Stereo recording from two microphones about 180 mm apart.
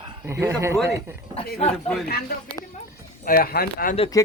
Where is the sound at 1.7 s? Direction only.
5° left (ahead or behind).